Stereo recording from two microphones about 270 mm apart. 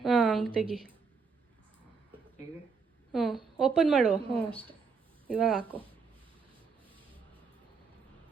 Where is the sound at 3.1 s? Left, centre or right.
Centre.